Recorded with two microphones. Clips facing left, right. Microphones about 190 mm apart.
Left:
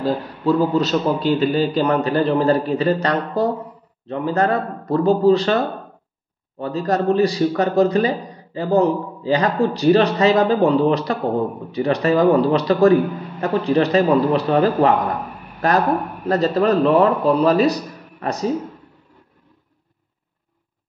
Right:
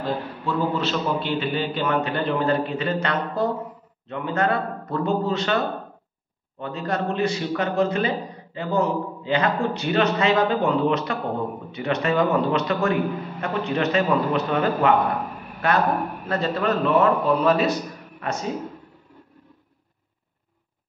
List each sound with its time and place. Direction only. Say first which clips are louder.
0.0 s a man's voice: left 6 dB; 40° left (ahead or behind)
6.6 s a man's voice: left 6 dB; 35° left (ahead or behind)